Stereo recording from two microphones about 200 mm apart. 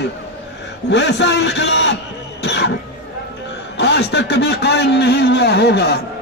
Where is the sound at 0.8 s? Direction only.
60° left (ahead or behind).